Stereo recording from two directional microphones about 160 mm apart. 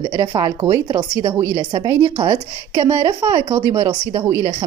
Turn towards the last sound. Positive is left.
turn(degrees=-20)  # may be behind; listen again after turning